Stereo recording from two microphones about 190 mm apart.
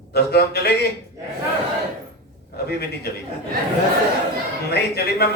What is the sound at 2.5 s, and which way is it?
Speech, 55° left (ahead or behind).